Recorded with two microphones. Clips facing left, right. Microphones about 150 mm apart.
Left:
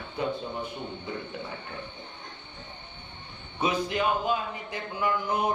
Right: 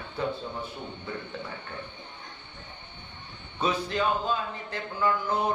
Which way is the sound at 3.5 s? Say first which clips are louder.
Left 1 dB; 15° left (ahead or behind).